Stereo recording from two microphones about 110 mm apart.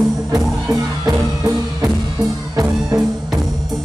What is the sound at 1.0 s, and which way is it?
Music, 35° right (ahead or behind).